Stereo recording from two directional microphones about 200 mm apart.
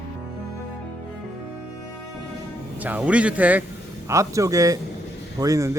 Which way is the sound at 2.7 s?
10° right (ahead or behind).